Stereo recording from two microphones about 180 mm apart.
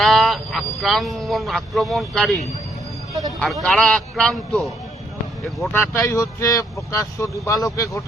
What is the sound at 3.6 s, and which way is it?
Speech, centre (ahead or behind).